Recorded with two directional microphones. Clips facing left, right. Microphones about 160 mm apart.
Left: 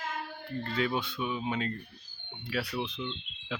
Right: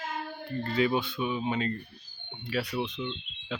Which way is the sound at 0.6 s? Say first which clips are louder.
Right 5 dB; 5° right (ahead or behind).